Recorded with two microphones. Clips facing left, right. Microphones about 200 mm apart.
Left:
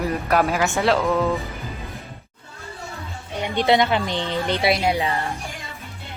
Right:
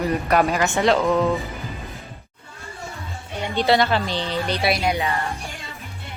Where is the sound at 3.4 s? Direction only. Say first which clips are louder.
Even; 15° left (ahead or behind).